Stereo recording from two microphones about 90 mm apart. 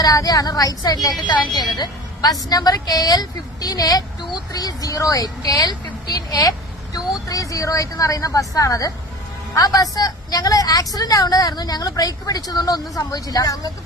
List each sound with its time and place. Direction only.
0.0 s a woman's voice: 45° left (ahead or behind)